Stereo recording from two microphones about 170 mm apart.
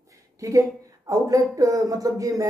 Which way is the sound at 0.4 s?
20° right (ahead or behind).